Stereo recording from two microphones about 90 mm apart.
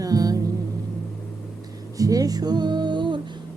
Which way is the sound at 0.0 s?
45° right (ahead or behind).